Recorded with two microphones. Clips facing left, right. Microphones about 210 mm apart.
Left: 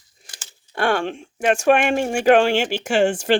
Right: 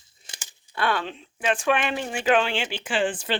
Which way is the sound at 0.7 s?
50° left (ahead or behind).